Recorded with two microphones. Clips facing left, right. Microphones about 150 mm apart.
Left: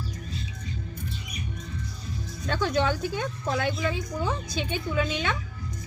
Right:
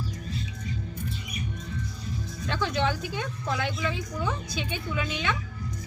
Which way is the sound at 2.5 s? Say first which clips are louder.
Left 2 dB; 40° left (ahead or behind).